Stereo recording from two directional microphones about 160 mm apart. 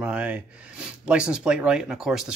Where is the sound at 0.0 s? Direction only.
5° right (ahead or behind).